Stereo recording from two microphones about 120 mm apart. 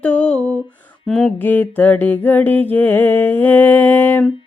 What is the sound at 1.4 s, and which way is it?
Mantra, 15° left (ahead or behind).